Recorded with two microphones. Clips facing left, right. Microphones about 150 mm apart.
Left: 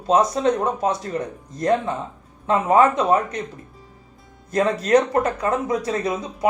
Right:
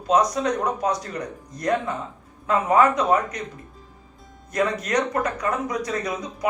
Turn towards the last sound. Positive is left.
turn(degrees=30)  # may be behind; listen again after turning